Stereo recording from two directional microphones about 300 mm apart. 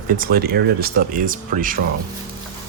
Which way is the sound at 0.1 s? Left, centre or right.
Right.